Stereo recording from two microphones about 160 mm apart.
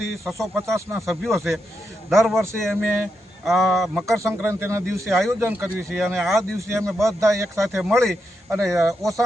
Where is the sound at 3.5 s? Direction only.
Centre (ahead or behind).